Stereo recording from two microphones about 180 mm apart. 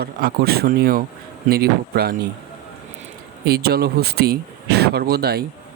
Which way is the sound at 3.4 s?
60° right (ahead or behind).